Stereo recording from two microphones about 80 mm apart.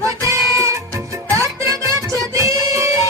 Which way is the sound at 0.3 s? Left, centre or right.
Right.